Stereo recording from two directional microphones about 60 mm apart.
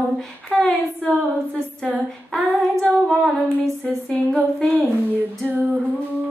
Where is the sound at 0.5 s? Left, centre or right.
Centre.